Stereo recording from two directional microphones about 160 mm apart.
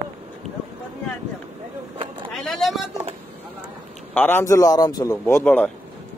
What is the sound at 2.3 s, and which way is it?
Vehicle, centre (ahead or behind).